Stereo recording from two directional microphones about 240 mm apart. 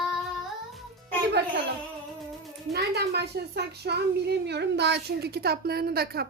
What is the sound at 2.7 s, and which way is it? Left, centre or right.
A child's voice, right.